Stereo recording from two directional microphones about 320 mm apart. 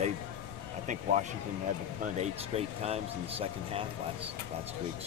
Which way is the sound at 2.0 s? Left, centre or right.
Centre.